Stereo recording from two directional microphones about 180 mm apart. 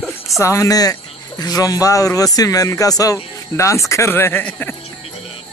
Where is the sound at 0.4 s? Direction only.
15° left (ahead or behind).